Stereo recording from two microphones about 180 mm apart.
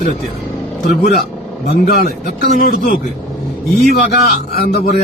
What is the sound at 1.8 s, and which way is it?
A man's voice, 55° left (ahead or behind).